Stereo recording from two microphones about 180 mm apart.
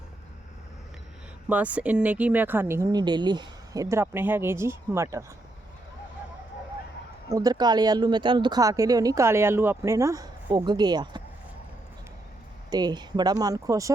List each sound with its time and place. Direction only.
1.5 s speech: 10° right (ahead or behind)
7.3 s speech: 20° right (ahead or behind)
12.7 s speech: 25° right (ahead or behind)